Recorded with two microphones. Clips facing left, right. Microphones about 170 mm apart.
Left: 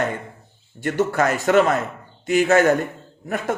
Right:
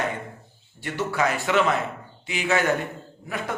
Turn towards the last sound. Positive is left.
turn(degrees=45)  # may be behind; listen again after turning